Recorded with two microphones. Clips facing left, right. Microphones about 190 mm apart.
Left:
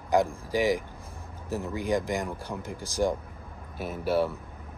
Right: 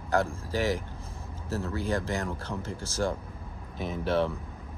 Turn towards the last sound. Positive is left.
turn(degrees=5)  # may be behind; listen again after turning